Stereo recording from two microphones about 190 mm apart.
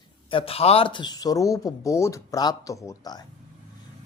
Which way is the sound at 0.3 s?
30° left (ahead or behind).